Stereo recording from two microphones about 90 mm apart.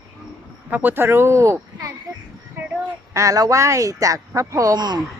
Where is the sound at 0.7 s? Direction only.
20° right (ahead or behind).